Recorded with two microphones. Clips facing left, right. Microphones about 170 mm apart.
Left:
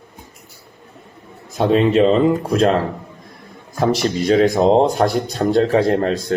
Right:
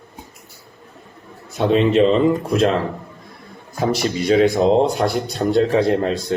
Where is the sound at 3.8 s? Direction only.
45° left (ahead or behind).